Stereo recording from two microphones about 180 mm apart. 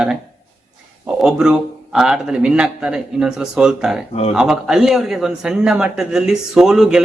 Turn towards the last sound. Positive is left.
turn(degrees=0)  # may be behind; listen again after turning